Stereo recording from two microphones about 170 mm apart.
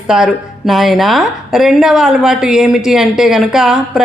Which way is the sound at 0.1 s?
Centre (ahead or behind).